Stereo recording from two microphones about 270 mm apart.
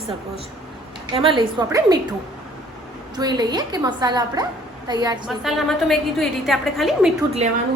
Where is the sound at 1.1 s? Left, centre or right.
Centre.